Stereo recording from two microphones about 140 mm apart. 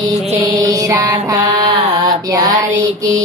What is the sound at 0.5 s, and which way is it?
Mantra, 25° right (ahead or behind).